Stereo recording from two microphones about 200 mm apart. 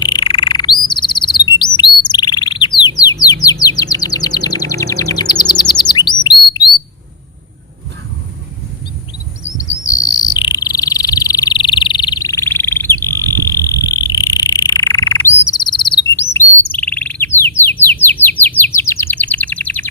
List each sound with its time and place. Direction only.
0.0 s chirp: 20° left (ahead or behind)
9.4 s insect: 15° left (ahead or behind)
16.3 s chirp: 5° left (ahead or behind)
17.7 s bird: 10° left (ahead or behind)